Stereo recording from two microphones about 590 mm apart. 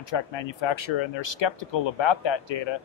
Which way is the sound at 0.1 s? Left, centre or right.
Left.